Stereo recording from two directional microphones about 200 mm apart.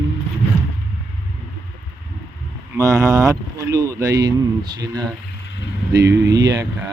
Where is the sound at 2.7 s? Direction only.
15° right (ahead or behind).